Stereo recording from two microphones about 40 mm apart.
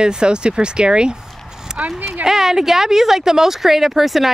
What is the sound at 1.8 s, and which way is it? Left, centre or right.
Speech, right.